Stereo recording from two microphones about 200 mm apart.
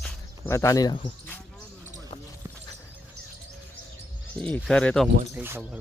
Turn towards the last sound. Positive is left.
turn(degrees=-10)  # may be behind; listen again after turning